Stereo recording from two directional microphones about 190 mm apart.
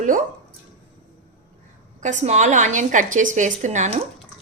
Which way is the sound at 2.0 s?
40° right (ahead or behind).